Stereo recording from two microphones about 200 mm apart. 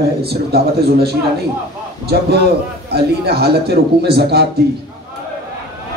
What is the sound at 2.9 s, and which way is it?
A man's voice, 50° right (ahead or behind).